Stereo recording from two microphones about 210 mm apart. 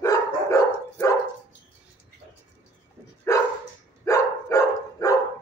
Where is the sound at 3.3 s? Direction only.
15° left (ahead or behind).